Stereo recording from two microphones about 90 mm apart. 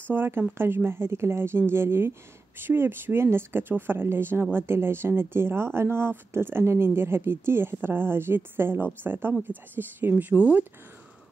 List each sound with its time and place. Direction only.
0.1 s speech: 25° right (ahead or behind)